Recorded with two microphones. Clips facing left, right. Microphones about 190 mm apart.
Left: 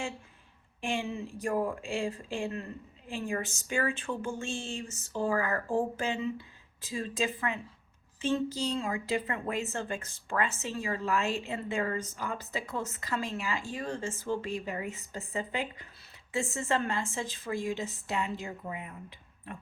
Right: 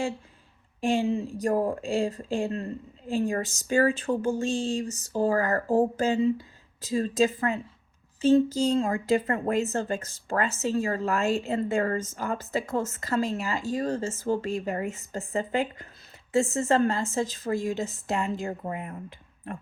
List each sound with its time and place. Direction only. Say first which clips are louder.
0.8 s a woman's voice: right 9 dB; 40° right (ahead or behind)